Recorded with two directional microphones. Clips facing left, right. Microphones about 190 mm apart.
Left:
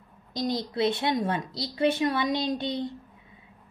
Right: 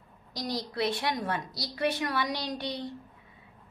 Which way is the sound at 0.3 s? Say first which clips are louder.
Left 5 dB; 20° left (ahead or behind).